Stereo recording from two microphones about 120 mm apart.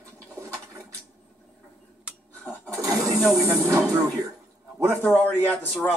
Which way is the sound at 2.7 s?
25° right (ahead or behind).